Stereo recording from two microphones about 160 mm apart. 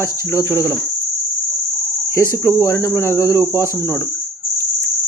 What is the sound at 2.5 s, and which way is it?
Speech, 20° left (ahead or behind).